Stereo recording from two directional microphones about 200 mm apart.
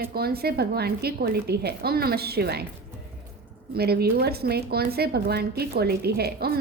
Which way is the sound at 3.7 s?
50° right (ahead or behind).